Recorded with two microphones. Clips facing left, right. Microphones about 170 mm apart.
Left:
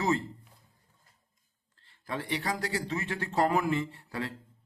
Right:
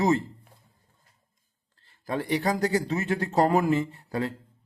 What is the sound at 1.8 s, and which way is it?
Speech, 40° right (ahead or behind).